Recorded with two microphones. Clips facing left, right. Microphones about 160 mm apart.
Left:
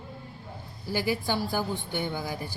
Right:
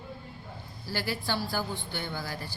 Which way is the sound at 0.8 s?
15° left (ahead or behind).